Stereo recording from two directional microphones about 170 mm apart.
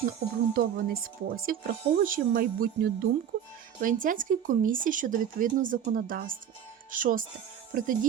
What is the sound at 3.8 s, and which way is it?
Speech, 50° right (ahead or behind).